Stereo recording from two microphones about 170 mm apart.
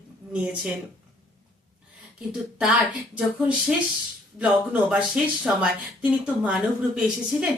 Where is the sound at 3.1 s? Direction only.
5° right (ahead or behind).